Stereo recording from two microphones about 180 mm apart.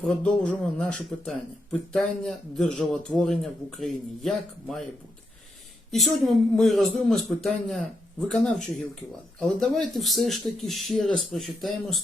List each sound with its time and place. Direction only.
0.0 s speech: 5° left (ahead or behind)
5.9 s speech: centre (ahead or behind)